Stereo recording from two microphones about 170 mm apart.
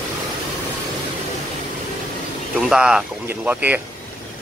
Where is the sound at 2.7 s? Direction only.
5° right (ahead or behind).